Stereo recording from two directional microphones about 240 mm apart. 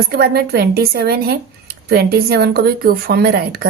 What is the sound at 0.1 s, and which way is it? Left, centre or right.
A woman's voice, right.